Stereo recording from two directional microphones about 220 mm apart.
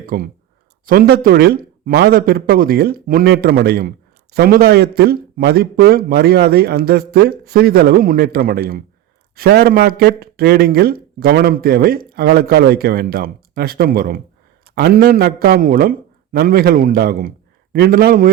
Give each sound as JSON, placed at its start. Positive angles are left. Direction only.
{"t": 0.0, "sound": "a man's voice", "side_deg": -40}